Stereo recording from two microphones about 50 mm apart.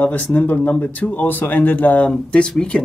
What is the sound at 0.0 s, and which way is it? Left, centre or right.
Speech, left.